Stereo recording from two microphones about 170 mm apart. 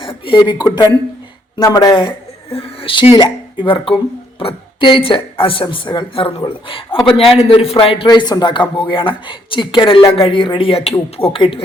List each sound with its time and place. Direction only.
0.0 s a woman's voice: 30° left (ahead or behind)